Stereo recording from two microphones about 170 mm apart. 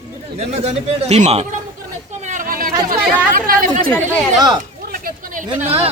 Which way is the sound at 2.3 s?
55° right (ahead or behind).